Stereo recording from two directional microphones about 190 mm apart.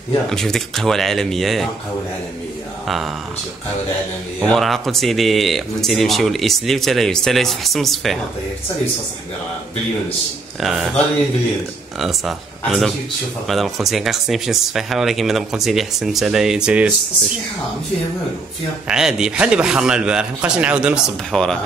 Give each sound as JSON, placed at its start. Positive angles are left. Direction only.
{"t": 0.3, "sound": "speech", "side_deg": 5}
{"t": 4.4, "sound": "speech", "side_deg": 0}
{"t": 10.6, "sound": "speech", "side_deg": 0}
{"t": 12.0, "sound": "speech", "side_deg": 0}
{"t": 18.9, "sound": "speech", "side_deg": -5}